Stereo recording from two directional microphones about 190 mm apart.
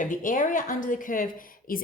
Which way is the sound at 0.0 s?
45° left (ahead or behind).